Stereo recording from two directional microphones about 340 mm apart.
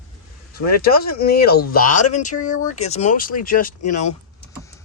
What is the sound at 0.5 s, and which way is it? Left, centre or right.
Speech, left.